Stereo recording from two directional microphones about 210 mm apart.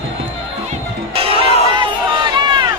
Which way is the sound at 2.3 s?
20° right (ahead or behind).